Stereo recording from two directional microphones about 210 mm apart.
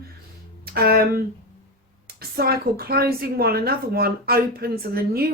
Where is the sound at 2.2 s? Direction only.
45° right (ahead or behind).